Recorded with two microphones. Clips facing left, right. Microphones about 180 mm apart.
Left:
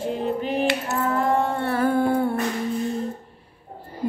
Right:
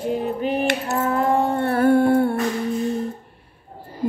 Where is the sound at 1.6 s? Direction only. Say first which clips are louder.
Right 4 dB; 55° right (ahead or behind).